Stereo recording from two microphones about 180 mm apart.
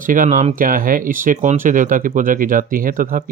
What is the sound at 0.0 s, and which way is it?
Speech, 50° right (ahead or behind).